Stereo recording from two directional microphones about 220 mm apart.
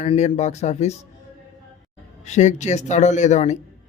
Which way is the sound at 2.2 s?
30° left (ahead or behind).